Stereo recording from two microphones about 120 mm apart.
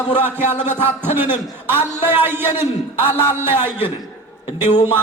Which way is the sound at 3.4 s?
20° right (ahead or behind).